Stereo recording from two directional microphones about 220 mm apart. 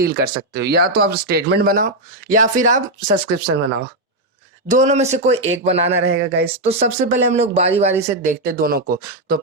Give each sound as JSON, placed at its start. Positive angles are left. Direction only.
{"t": 0.0, "sound": "speech", "side_deg": -45}
{"t": 4.7, "sound": "speech", "side_deg": -30}
{"t": 6.1, "sound": "speech", "side_deg": -50}
{"t": 6.6, "sound": "speech", "side_deg": -30}